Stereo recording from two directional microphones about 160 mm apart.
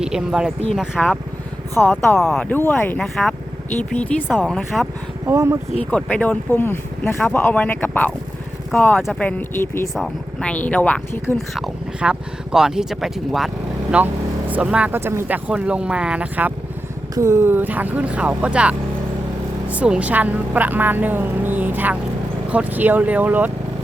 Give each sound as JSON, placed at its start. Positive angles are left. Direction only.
{"t": 0.0, "sound": "speech", "side_deg": -5}
{"t": 2.1, "sound": "speech", "side_deg": 0}
{"t": 5.2, "sound": "a woman's voice", "side_deg": -15}
{"t": 5.8, "sound": "a woman's voice", "side_deg": 5}